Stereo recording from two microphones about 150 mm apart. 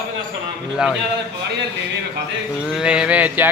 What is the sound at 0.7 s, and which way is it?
Speech, 5° right (ahead or behind).